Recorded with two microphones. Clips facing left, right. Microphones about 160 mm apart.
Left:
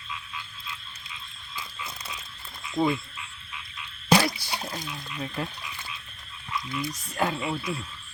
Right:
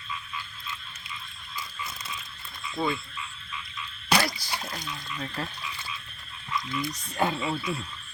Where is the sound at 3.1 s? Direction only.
65° left (ahead or behind).